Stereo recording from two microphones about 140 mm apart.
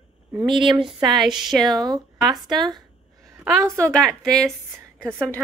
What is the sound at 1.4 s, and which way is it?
Speech, centre (ahead or behind).